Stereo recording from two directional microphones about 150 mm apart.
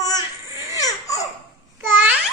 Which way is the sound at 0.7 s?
25° left (ahead or behind).